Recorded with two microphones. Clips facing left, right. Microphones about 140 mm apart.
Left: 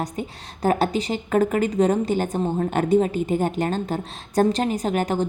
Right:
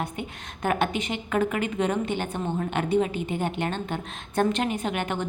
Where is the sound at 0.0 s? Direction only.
35° left (ahead or behind).